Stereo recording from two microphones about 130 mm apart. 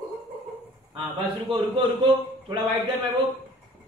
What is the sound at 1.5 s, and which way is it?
A man's voice, 35° right (ahead or behind).